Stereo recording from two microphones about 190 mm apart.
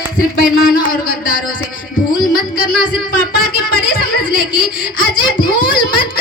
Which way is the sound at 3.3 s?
50° left (ahead or behind).